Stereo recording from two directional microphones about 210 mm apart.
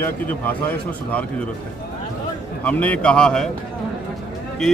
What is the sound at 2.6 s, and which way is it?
Speech, 5° left (ahead or behind).